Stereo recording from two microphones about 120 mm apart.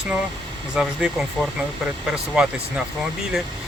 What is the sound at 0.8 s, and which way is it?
Speech, 5° right (ahead or behind).